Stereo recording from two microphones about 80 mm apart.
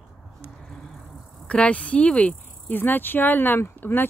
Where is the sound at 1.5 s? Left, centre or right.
Centre.